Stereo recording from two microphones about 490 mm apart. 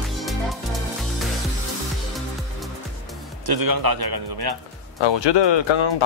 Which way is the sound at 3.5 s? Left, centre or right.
Right.